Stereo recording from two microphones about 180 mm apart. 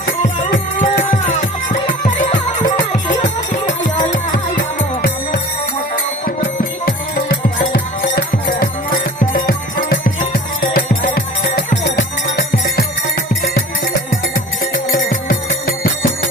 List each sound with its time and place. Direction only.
0.5 s music: 55° left (ahead or behind)
14.8 s music: 50° left (ahead or behind)